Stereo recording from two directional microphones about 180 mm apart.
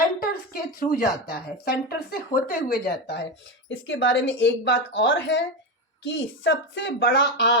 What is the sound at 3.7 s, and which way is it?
A woman's voice, 90° left.